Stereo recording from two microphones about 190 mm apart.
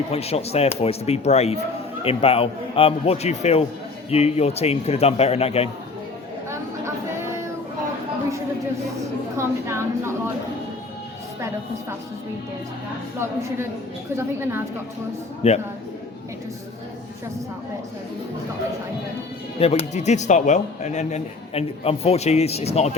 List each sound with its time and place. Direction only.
0.1 s speech: 30° left (ahead or behind)
9.4 s a woman's voice: 15° right (ahead or behind)
14.2 s a woman's voice: 10° right (ahead or behind)
15.4 s speech: 35° left (ahead or behind)
19.5 s speech: 30° left (ahead or behind)